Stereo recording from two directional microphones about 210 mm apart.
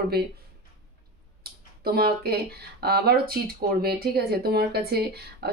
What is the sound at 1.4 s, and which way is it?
Speech, 45° right (ahead or behind).